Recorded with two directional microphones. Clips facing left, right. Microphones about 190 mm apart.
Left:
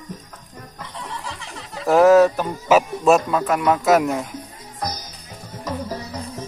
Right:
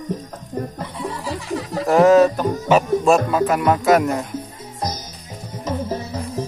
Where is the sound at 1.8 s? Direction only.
Centre (ahead or behind).